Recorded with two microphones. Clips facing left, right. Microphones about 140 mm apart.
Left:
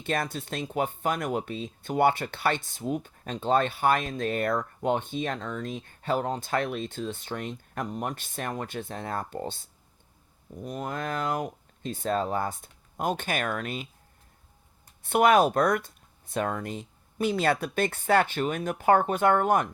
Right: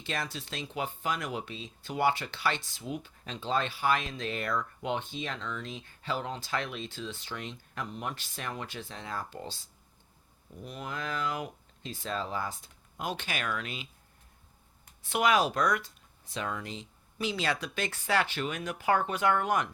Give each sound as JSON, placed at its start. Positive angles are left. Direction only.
{"t": 0.0, "sound": "speech", "side_deg": 50}
{"t": 15.0, "sound": "speech", "side_deg": 55}